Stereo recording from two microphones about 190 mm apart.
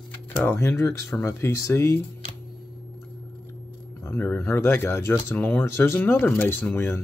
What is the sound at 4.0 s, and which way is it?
Speech, 10° left (ahead or behind).